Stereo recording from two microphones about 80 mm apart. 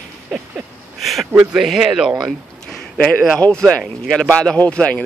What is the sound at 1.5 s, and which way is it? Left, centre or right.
Speech, centre.